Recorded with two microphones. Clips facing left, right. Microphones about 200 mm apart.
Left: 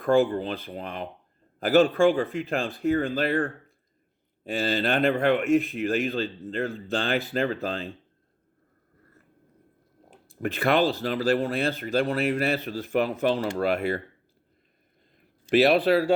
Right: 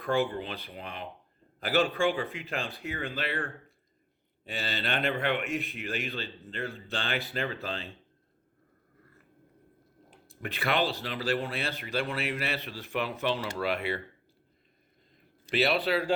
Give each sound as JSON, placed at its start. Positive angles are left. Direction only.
{"t": 0.0, "sound": "speech", "side_deg": 45}
{"t": 10.1, "sound": "speech", "side_deg": 45}
{"t": 15.4, "sound": "speech", "side_deg": 50}